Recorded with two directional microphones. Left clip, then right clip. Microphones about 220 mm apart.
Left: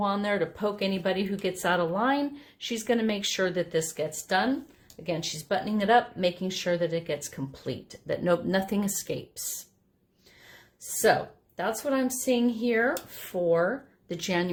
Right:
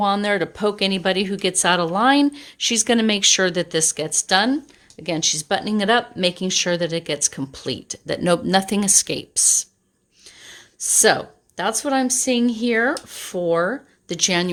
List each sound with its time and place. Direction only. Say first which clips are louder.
0.0 s speech: right 8 dB; 45° right (ahead or behind)
11.0 s speech: right 5 dB; 45° right (ahead or behind)